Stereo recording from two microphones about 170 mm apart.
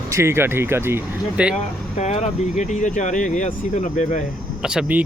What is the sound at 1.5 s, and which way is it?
Speech, 40° left (ahead or behind).